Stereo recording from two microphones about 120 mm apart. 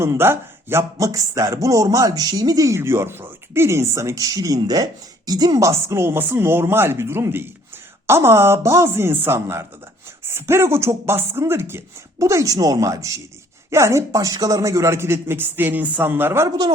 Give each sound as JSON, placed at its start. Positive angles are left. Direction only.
{"t": 0.0, "sound": "speech", "side_deg": -20}